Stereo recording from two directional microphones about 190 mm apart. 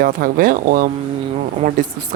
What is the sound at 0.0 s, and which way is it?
Speech, 50° right (ahead or behind).